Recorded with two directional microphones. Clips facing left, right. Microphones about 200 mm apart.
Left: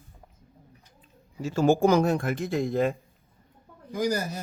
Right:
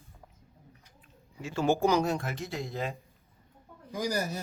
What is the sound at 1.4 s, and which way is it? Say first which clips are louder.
Speech: left 5 dB; 45° left (ahead or behind).